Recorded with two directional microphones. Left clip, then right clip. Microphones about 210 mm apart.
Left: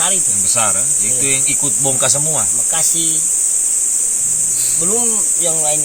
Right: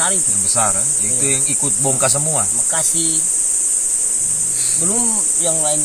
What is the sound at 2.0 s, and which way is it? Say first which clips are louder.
Speech: left 1 dB; 20° right (ahead or behind).